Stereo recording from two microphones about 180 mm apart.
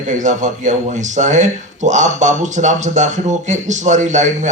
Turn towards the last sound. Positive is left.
turn(degrees=-40)  # may be behind; listen again after turning